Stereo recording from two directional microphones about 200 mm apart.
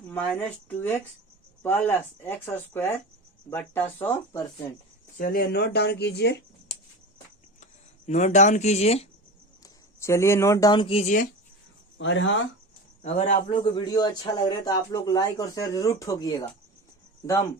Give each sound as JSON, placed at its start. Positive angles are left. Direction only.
{"t": 0.1, "sound": "speech", "side_deg": 5}
{"t": 5.1, "sound": "speech", "side_deg": 45}
{"t": 7.6, "sound": "speech", "side_deg": 35}
{"t": 9.6, "sound": "speech", "side_deg": 15}
{"t": 11.9, "sound": "speech", "side_deg": 70}
{"t": 13.0, "sound": "speech", "side_deg": 35}